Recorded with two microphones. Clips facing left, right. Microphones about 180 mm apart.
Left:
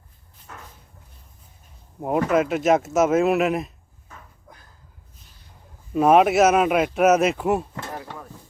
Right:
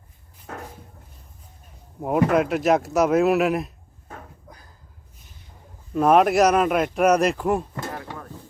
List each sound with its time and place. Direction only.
0.4 s a sound: 60° right (ahead or behind)
2.0 s speech: centre (ahead or behind)
5.9 s speech: 5° left (ahead or behind)